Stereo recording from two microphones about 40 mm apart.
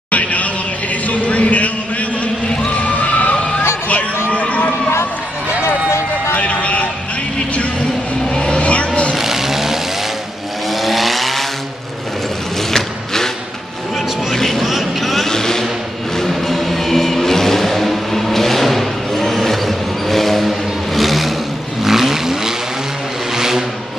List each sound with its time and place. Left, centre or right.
0.1 s a sound: left
6.3 s vehicle: left
8.4 s vehicle: left
9.1 s vehicle: centre
12.7 s vehicle: centre
14.3 s vehicle: centre
15.2 s vehicle: centre